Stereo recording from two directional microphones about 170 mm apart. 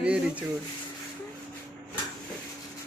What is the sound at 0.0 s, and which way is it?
Speech, 5° right (ahead or behind).